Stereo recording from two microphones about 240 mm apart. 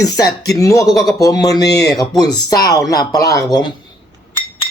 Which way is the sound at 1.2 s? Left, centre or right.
Centre.